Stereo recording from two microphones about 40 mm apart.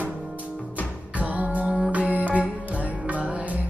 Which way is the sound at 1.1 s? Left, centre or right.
Right.